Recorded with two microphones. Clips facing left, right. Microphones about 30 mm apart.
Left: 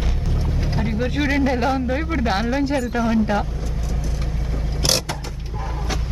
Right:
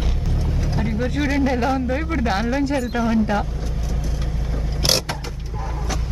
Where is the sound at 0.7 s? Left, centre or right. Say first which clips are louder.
Even; centre.